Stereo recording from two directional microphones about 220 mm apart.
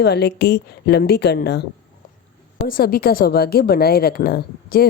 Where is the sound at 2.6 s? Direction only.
40° left (ahead or behind).